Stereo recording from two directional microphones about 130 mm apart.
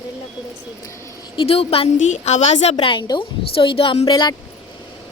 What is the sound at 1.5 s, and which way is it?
Speech, 50° left (ahead or behind).